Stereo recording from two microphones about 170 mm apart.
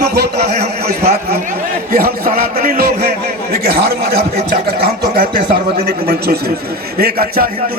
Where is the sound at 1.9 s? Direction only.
60° right (ahead or behind).